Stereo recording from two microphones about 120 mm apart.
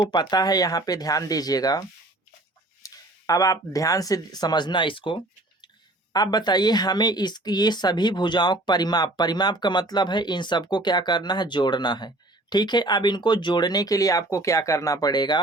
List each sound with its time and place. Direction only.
0.0 s speech: 35° left (ahead or behind)
2.8 s speech: 30° left (ahead or behind)